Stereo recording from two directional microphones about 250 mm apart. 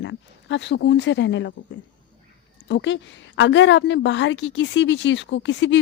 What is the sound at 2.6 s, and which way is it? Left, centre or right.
A woman's voice, left.